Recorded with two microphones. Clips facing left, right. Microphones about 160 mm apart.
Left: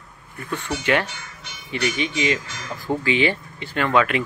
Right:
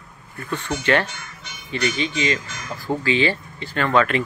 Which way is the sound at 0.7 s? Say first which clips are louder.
Right 1 dB; 10° left (ahead or behind).